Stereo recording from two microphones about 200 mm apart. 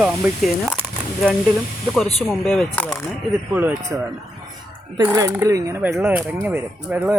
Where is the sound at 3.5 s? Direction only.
10° right (ahead or behind).